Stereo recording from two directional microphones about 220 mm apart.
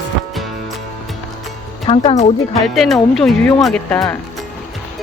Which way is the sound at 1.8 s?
25° left (ahead or behind).